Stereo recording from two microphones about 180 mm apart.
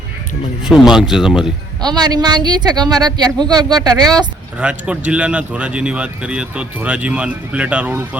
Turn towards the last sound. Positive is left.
turn(degrees=-10)  # may be behind; listen again after turning